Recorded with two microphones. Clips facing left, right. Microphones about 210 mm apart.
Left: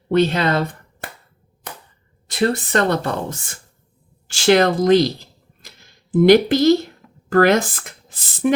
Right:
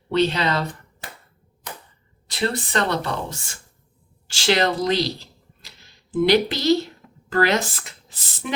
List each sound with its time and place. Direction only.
0.1 s speech: 50° left (ahead or behind)
2.2 s speech: 50° left (ahead or behind)